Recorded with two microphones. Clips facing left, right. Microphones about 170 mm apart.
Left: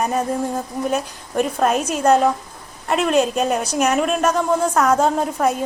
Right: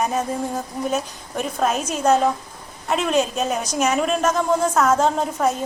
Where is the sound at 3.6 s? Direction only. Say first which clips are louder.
Left 2 dB; 10° left (ahead or behind).